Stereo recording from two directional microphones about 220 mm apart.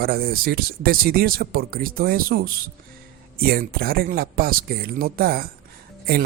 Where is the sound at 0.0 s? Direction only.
45° right (ahead or behind).